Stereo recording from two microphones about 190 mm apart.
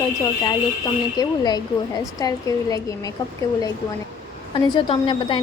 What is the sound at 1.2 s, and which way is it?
A woman's voice, 20° left (ahead or behind).